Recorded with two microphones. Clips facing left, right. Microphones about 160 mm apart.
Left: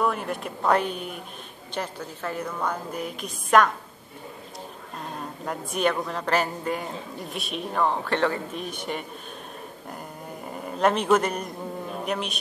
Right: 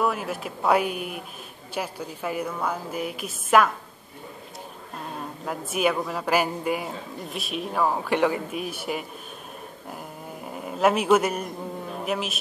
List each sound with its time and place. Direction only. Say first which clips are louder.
0.0 s speech: even; 5° right (ahead or behind)
5.4 s speech: right 1 dB; 5° right (ahead or behind)
10.4 s speech: right 1 dB; 5° right (ahead or behind)